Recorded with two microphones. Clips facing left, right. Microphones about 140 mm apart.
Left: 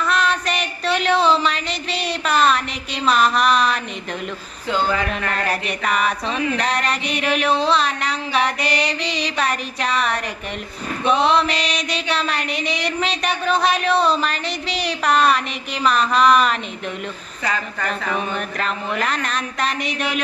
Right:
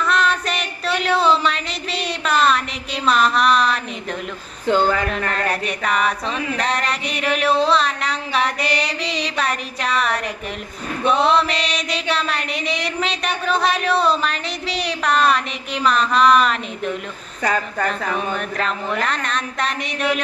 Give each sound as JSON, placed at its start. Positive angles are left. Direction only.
{"t": 0.0, "sound": "a sound", "side_deg": 0}
{"t": 3.1, "sound": "mantra", "side_deg": 0}
{"t": 5.3, "sound": "mantra", "side_deg": 0}
{"t": 17.4, "sound": "a woman's voice", "side_deg": -45}
{"t": 18.6, "sound": "mantra", "side_deg": 0}